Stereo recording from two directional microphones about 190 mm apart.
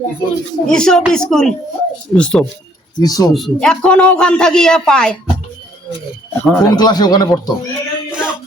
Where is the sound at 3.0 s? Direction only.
20° left (ahead or behind).